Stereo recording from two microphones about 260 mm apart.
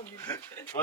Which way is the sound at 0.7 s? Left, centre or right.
Left.